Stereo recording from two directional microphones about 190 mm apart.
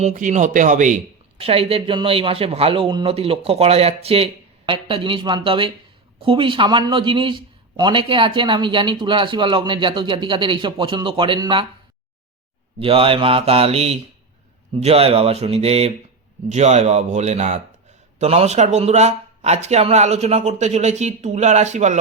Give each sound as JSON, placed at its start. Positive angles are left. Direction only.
{"t": 0.0, "sound": "speech", "side_deg": -40}
{"t": 12.8, "sound": "speech", "side_deg": -30}